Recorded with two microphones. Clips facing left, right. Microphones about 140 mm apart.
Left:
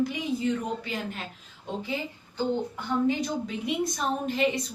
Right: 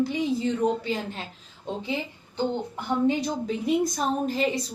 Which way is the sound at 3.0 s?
35° right (ahead or behind).